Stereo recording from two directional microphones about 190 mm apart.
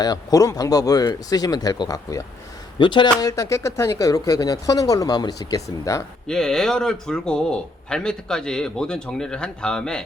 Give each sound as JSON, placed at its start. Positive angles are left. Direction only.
{"t": 0.0, "sound": "speech", "side_deg": 20}
{"t": 6.2, "sound": "a man's voice", "side_deg": 5}